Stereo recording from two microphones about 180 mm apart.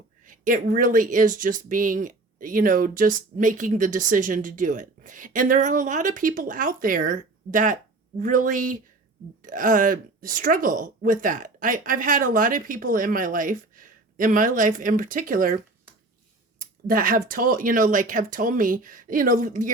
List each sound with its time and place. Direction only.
0.3 s speech: 50° right (ahead or behind)
16.6 s speech: 50° right (ahead or behind)